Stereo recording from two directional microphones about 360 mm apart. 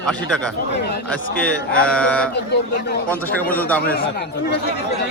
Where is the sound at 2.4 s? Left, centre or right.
Left.